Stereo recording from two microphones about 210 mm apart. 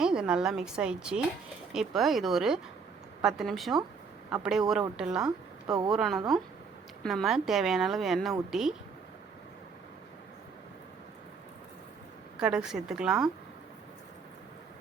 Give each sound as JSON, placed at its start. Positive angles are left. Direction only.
{"t": 0.0, "sound": "speech", "side_deg": -5}
{"t": 5.6, "sound": "speech", "side_deg": -15}
{"t": 5.9, "sound": "speech", "side_deg": 0}
{"t": 12.4, "sound": "speech", "side_deg": -5}